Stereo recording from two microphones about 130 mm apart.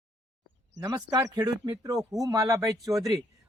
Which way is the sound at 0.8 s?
25° right (ahead or behind).